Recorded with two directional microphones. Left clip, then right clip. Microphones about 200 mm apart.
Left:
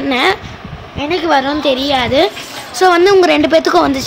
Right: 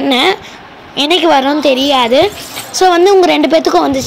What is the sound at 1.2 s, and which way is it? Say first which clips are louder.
A woman's voice: right 1 dB; 15° right (ahead or behind).